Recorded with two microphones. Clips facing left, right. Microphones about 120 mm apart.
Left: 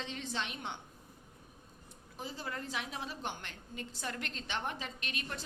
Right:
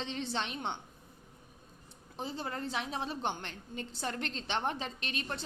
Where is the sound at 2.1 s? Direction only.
30° right (ahead or behind).